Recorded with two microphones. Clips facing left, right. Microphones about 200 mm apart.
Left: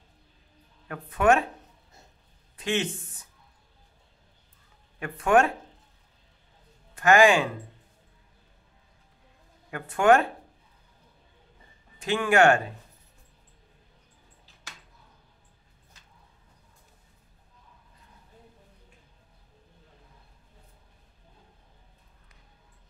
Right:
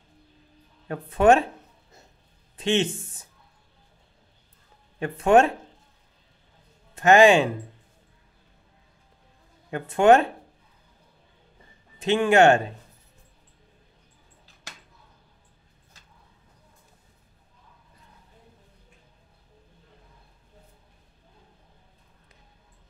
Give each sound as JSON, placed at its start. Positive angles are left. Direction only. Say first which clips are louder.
{"t": 0.8, "sound": "speech", "louder": "right 4 dB", "side_deg": -30}
{"t": 2.5, "sound": "a sound", "louder": "right 5 dB", "side_deg": -25}
{"t": 4.9, "sound": "speech", "louder": "right 4 dB", "side_deg": -25}
{"t": 7.0, "sound": "speech", "louder": "right 4 dB", "side_deg": -25}
{"t": 9.7, "sound": "speech", "louder": "right 3 dB", "side_deg": -25}
{"t": 12.0, "sound": "speech", "louder": "right 4 dB", "side_deg": -25}